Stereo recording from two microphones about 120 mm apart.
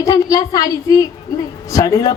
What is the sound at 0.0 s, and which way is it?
A woman's voice, 30° left (ahead or behind).